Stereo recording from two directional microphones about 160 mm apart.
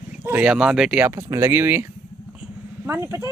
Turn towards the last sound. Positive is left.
turn(degrees=-15)  # may be behind; listen again after turning